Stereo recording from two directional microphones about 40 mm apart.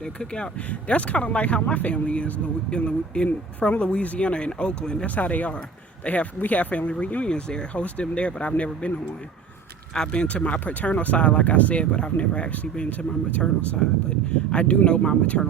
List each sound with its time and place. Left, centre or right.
0.0 s speech: left
0.7 s speech: left
5.0 s speech: left
7.3 s speech: left
7.7 s speech: left
9.9 s speech: left
11.8 s speech: left
14.5 s speech: left